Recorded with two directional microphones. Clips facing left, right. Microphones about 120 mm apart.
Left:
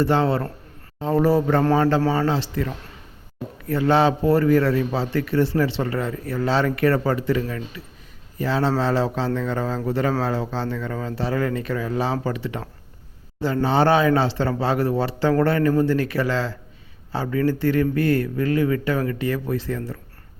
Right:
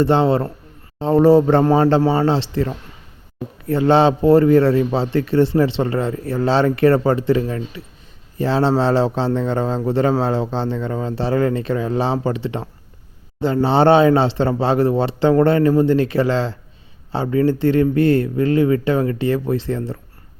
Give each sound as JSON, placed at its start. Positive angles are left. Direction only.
{"t": 0.0, "sound": "a man's voice", "side_deg": -25}